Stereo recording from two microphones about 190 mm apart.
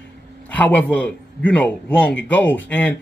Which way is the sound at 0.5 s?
10° left (ahead or behind).